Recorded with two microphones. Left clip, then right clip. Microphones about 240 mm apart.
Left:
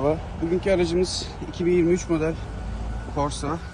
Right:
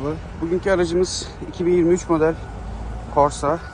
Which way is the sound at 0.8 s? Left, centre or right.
Centre.